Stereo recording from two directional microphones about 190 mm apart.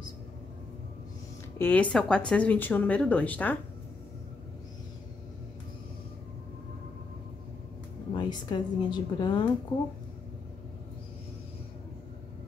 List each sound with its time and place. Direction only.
1.6 s speech: 10° left (ahead or behind)
8.1 s a woman's voice: 25° left (ahead or behind)